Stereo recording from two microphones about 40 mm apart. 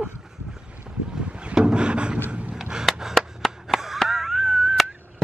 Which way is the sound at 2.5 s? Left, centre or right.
Centre.